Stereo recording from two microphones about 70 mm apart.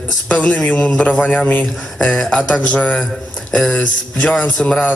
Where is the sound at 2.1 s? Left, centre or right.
Centre.